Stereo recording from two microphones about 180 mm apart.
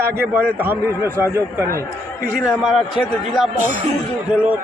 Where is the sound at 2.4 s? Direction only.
5° right (ahead or behind).